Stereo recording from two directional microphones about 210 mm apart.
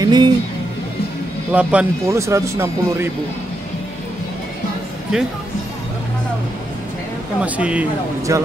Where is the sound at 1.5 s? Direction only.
5° right (ahead or behind).